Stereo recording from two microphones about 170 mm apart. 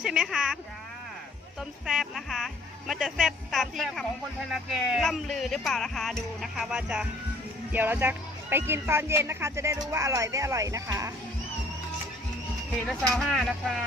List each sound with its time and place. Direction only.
0.0 s speech: 5° right (ahead or behind)
1.9 s speech: centre (ahead or behind); by 11.1 s 20° right (ahead or behind)
12.8 s speech: 5° left (ahead or behind)